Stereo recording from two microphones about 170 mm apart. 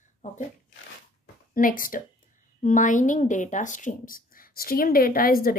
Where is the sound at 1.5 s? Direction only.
55° left (ahead or behind).